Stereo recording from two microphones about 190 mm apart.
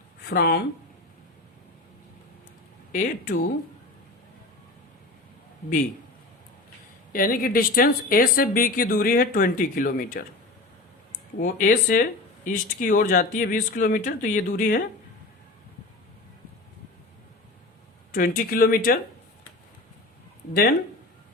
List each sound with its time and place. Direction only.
0.3 s a woman's voice: 55° left (ahead or behind)
2.9 s speech: 45° left (ahead or behind)
7.1 s speech: 50° left (ahead or behind)
11.3 s speech: 45° left (ahead or behind)
18.1 s speech: 45° left (ahead or behind)